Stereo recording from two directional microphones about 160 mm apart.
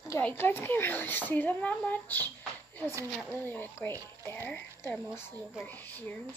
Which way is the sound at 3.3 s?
10° left (ahead or behind).